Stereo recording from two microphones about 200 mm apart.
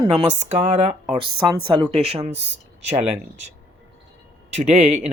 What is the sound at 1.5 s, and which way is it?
Speech, 25° right (ahead or behind).